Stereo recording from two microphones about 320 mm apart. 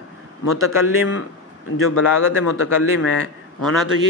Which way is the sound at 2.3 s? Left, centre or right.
Left.